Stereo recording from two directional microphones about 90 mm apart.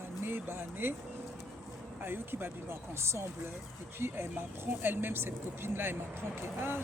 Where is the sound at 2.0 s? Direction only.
25° right (ahead or behind).